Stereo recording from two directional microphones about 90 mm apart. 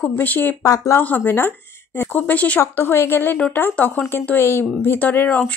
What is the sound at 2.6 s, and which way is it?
Speech, 25° left (ahead or behind).